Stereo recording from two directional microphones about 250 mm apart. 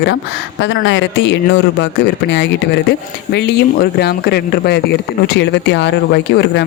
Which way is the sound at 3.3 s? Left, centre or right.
Left.